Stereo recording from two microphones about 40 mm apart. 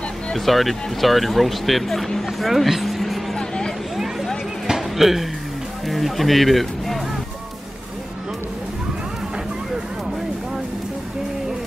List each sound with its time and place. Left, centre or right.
0.3 s speech: centre
2.7 s vehicle: centre
3.3 s a sound: centre
3.9 s a sound: centre
4.6 s music: centre
5.9 s speech: centre